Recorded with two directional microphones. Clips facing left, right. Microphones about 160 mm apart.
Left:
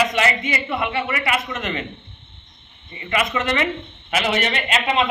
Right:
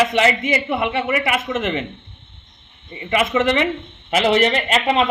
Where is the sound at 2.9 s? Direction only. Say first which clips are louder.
Right 4 dB; 25° right (ahead or behind).